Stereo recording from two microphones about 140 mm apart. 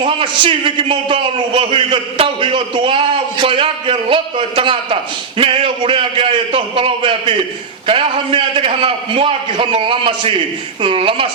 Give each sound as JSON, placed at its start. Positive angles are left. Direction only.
{"t": 0.0, "sound": "a man's voice", "side_deg": -40}